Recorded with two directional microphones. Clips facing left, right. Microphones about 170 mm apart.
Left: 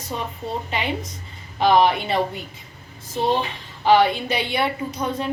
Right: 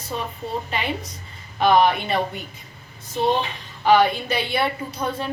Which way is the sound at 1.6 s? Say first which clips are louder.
Even; 25° left (ahead or behind).